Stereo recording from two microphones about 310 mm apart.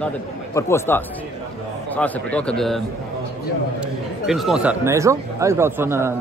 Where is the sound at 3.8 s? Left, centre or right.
Centre.